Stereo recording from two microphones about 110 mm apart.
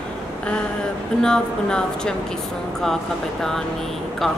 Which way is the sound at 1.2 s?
5° left (ahead or behind).